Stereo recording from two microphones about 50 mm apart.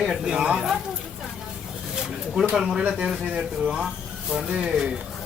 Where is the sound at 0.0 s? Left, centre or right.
Centre.